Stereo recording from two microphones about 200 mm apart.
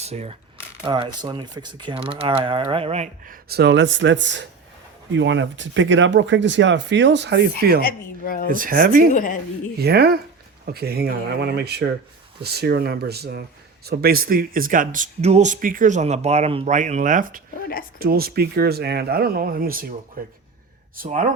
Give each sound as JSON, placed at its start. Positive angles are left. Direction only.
{"t": 0.0, "sound": "speech", "side_deg": -30}
{"t": 3.5, "sound": "speech", "side_deg": -55}
{"t": 7.8, "sound": "speech", "side_deg": 45}
{"t": 8.4, "sound": "speech", "side_deg": -45}
{"t": 9.1, "sound": "speech", "side_deg": 45}
{"t": 9.7, "sound": "speech", "side_deg": -50}